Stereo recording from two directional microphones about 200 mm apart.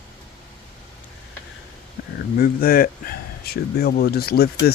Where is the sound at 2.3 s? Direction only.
50° left (ahead or behind).